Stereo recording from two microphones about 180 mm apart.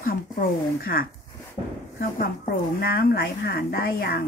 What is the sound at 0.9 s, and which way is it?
Speech, 60° left (ahead or behind).